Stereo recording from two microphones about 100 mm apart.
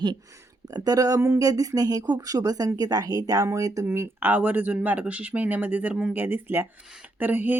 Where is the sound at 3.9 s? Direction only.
20° right (ahead or behind).